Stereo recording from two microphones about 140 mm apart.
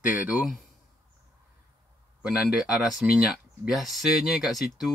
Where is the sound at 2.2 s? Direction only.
5° right (ahead or behind).